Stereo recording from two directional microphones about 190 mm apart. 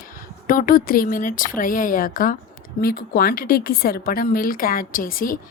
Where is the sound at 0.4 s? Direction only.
45° left (ahead or behind).